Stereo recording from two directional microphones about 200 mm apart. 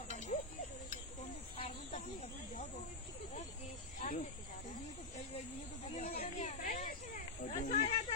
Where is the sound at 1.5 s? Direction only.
30° left (ahead or behind).